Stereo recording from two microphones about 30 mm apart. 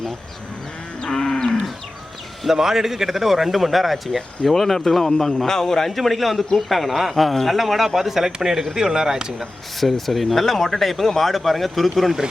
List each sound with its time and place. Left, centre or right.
1.1 s livestock: centre
2.5 s speech: centre
5.9 s speech: centre
9.8 s speech: centre